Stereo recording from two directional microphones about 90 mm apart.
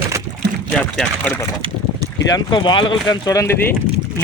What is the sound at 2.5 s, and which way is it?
Speech, 60° left (ahead or behind).